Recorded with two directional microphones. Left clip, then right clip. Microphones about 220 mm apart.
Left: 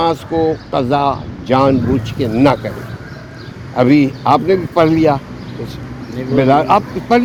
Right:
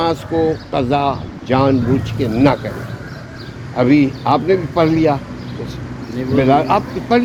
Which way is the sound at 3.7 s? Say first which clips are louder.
Left 2 dB; 40° left (ahead or behind).